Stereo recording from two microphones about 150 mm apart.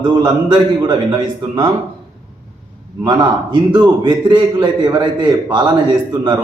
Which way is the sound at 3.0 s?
30° right (ahead or behind).